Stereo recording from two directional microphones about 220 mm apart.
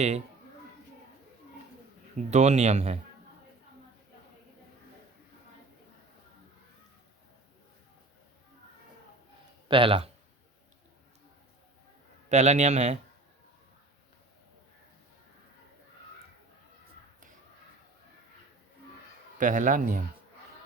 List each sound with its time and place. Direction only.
2.1 s speech: 30° right (ahead or behind)
9.6 s speech: 25° right (ahead or behind)
12.3 s speech: 30° right (ahead or behind)
19.4 s speech: 35° right (ahead or behind)